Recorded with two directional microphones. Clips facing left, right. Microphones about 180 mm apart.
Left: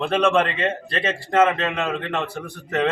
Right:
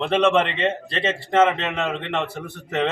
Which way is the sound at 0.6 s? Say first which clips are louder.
Right 1 dB; 25° right (ahead or behind).